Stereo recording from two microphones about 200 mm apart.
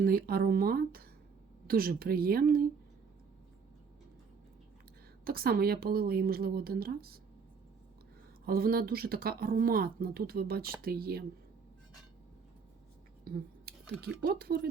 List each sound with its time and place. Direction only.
0.0 s speech: 50° right (ahead or behind)
5.2 s speech: 50° right (ahead or behind)
8.4 s speech: 50° right (ahead or behind)
13.2 s speech: 50° right (ahead or behind)